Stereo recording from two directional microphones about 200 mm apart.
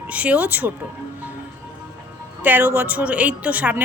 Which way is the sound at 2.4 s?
10° right (ahead or behind).